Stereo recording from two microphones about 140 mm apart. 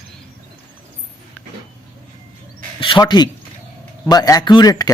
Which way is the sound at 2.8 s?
35° left (ahead or behind).